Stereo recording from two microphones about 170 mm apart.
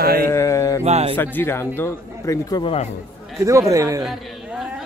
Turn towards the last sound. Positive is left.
turn(degrees=-5)  # may be behind; listen again after turning